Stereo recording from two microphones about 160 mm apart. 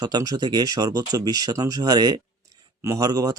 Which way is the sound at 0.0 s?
25° right (ahead or behind).